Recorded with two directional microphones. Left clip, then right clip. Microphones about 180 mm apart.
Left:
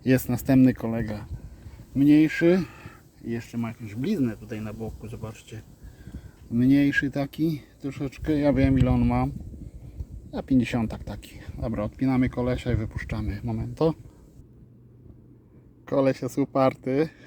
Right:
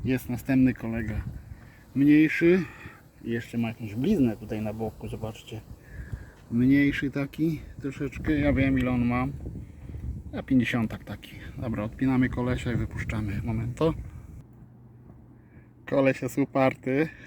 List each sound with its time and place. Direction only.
0.0 s speech: 45° left (ahead or behind); by 4.9 s centre (ahead or behind)
6.6 s speech: 20° left (ahead or behind)
10.3 s speech: 10° left (ahead or behind)
15.9 s speech: 10° left (ahead or behind)